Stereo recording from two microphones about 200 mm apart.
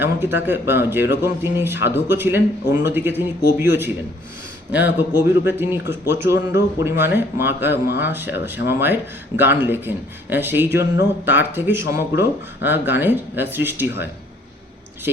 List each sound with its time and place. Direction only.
0.0 s speech: 10° right (ahead or behind)